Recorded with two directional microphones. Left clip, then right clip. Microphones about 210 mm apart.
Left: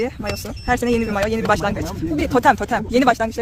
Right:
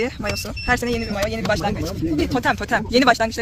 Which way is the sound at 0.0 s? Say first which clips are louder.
Even; 5° left (ahead or behind).